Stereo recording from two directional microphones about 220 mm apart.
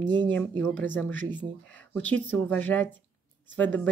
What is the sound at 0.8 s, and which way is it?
Speech, 10° left (ahead or behind).